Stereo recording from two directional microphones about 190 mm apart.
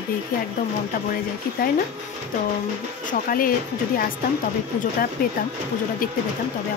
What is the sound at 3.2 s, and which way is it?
Speech, 50° left (ahead or behind).